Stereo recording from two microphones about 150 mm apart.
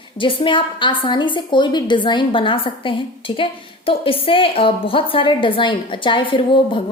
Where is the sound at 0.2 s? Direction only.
35° left (ahead or behind).